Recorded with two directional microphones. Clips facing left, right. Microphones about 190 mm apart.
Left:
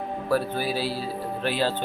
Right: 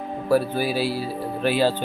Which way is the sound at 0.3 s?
10° right (ahead or behind).